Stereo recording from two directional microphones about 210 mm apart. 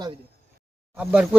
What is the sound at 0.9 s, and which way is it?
Speech, 5° right (ahead or behind).